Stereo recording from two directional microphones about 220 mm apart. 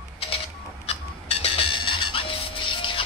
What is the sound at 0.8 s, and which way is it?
Music, 25° left (ahead or behind).